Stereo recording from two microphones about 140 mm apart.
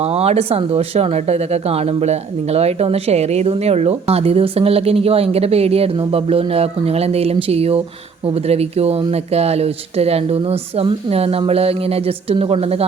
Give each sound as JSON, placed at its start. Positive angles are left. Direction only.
{"t": 0.0, "sound": "speech", "side_deg": -45}